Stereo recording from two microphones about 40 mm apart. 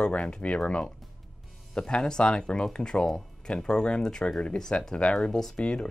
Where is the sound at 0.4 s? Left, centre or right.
Left.